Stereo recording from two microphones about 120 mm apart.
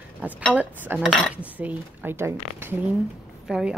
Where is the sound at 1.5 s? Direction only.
15° right (ahead or behind).